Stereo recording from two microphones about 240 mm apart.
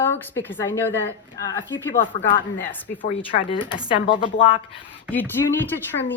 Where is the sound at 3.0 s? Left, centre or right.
Left.